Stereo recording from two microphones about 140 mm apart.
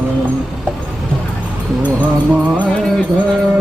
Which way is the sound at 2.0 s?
10° right (ahead or behind).